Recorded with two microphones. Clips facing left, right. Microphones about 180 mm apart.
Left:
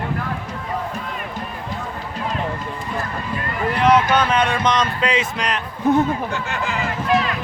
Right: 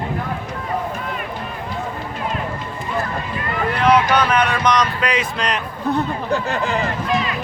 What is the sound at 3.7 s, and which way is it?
Speech, 20° left (ahead or behind).